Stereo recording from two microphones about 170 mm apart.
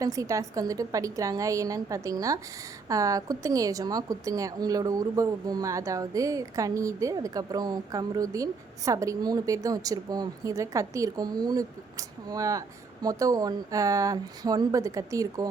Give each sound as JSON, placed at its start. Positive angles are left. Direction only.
{"t": 0.0, "sound": "a woman's voice", "side_deg": -20}